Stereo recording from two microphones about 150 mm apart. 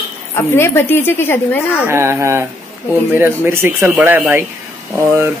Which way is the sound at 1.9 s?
15° right (ahead or behind).